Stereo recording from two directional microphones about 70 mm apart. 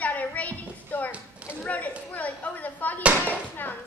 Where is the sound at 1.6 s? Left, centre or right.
Left.